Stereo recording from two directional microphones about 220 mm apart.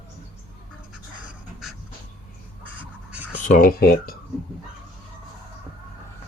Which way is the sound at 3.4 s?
40° left (ahead or behind).